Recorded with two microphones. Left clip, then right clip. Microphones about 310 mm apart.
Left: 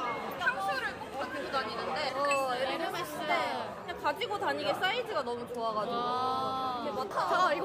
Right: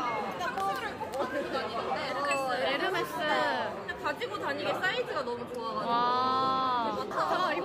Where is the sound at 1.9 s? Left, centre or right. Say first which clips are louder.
Left 2 dB; left.